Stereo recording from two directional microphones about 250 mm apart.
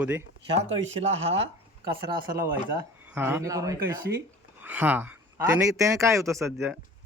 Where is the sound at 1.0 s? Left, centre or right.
Right.